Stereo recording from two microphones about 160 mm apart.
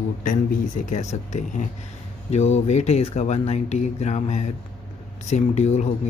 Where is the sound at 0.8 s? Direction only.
50° left (ahead or behind).